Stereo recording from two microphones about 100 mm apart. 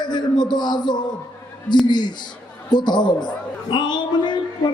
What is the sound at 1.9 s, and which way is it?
A man's voice, 45° left (ahead or behind).